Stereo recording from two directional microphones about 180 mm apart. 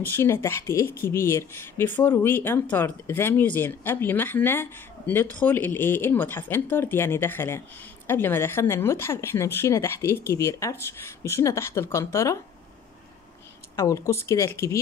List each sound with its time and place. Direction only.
0.0 s speech: 15° left (ahead or behind)
13.7 s speech: 15° left (ahead or behind)